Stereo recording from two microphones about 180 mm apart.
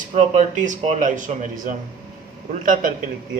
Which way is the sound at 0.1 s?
45° right (ahead or behind).